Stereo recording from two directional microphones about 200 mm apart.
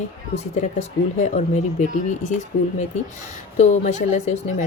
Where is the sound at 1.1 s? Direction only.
35° left (ahead or behind).